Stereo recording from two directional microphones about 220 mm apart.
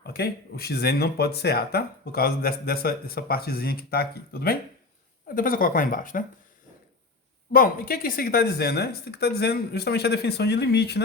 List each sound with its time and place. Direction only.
0.0 s speech: 45° left (ahead or behind)
7.5 s speech: 40° left (ahead or behind)